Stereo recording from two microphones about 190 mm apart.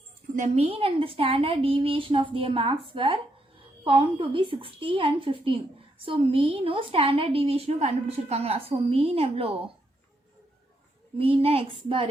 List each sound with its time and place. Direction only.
0.3 s a woman's voice: 35° right (ahead or behind)
11.2 s a woman's voice: 30° right (ahead or behind)